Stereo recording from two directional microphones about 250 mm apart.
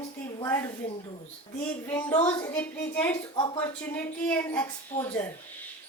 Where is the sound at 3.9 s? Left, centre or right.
Centre.